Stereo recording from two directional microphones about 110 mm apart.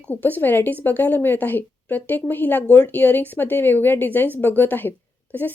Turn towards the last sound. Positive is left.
turn(degrees=15)  # may be behind; listen again after turning